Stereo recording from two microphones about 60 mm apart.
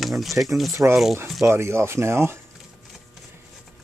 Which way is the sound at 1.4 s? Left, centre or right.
Right.